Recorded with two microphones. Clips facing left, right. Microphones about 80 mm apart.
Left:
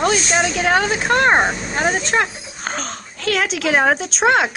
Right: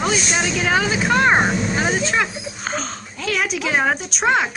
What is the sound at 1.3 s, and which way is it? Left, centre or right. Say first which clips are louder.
Speech: left 1 dB; centre.